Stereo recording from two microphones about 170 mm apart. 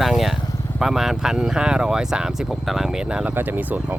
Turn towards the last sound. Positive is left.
turn(degrees=-10)  # may be behind; listen again after turning